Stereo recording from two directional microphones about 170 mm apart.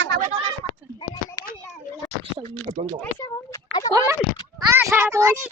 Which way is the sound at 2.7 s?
45° right (ahead or behind).